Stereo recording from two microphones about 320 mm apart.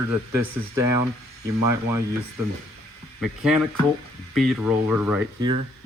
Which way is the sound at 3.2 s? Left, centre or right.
Centre.